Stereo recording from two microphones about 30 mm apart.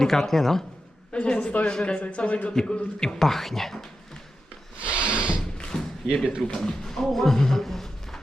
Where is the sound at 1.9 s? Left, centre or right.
Left.